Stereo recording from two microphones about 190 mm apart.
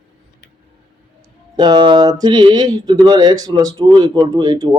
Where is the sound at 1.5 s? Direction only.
25° right (ahead or behind).